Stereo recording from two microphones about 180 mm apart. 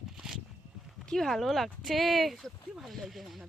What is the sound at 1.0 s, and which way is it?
Speech, centre (ahead or behind).